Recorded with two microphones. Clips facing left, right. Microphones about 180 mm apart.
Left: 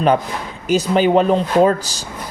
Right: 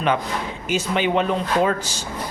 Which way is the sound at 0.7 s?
40° left (ahead or behind).